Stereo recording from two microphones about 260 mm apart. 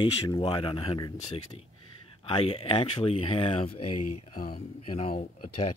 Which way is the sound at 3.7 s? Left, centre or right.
Left.